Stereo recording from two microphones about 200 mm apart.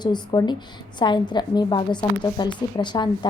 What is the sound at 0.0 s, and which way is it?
A woman's voice, 20° left (ahead or behind).